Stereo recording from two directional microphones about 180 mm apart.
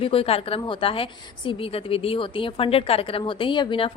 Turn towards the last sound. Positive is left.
turn(degrees=30)  # may be behind; listen again after turning